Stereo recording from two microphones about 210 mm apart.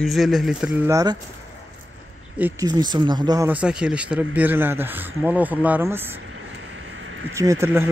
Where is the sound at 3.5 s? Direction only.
5° right (ahead or behind).